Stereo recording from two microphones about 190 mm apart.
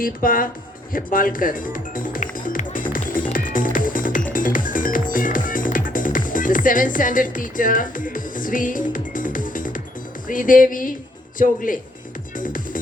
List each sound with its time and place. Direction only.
0.0 s speech: 45° left (ahead or behind)
0.9 s music: 45° left (ahead or behind)
11.3 s speech: 45° left (ahead or behind)
12.4 s music: 45° left (ahead or behind)